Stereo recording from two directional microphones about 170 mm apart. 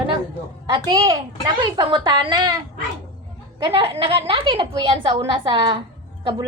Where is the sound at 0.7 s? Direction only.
30° right (ahead or behind).